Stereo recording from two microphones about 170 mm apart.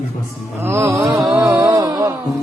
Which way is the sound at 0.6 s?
15° right (ahead or behind).